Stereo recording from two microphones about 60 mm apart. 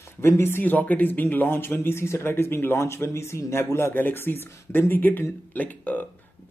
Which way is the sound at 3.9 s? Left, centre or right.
Left.